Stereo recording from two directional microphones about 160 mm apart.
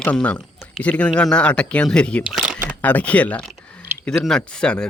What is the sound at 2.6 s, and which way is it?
Speech, 10° left (ahead or behind).